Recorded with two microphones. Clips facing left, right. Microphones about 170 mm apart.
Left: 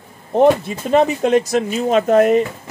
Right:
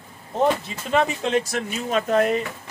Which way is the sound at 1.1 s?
45° left (ahead or behind).